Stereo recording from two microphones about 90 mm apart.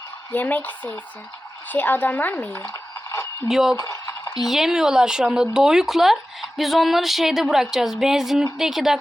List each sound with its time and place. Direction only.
0.3 s speech: 20° left (ahead or behind)
1.7 s speech: 20° left (ahead or behind)
2.6 s a sound: 30° left (ahead or behind)
3.5 s speech: 5° right (ahead or behind)
3.8 s stir: 40° left (ahead or behind)
4.4 s speech: 5° right (ahead or behind)